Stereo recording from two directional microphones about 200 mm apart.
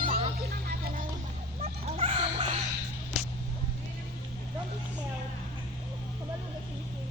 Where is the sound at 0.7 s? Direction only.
50° right (ahead or behind).